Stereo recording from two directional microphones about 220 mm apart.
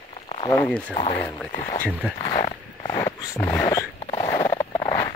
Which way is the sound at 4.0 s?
25° left (ahead or behind).